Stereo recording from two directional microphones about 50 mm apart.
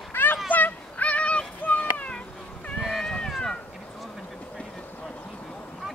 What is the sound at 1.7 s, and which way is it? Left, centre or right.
Cat, left.